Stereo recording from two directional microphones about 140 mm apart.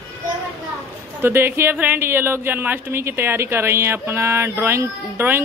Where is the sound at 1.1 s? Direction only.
15° right (ahead or behind).